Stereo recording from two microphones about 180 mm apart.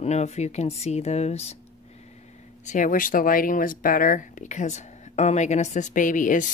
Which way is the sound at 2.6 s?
45° left (ahead or behind).